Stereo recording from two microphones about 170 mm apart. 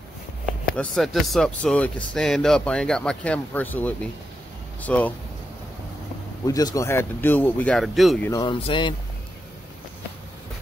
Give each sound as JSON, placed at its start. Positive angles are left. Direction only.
{"t": 0.7, "sound": "speech", "side_deg": 5}
{"t": 6.4, "sound": "speech", "side_deg": 20}
{"t": 8.3, "sound": "speech", "side_deg": 25}